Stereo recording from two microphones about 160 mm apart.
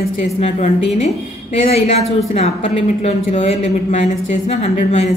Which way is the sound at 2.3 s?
40° left (ahead or behind).